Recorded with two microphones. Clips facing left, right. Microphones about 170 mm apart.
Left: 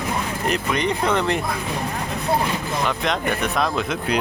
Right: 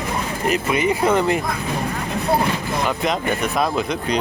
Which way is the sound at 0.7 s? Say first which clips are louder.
Right 4 dB; 5° right (ahead or behind).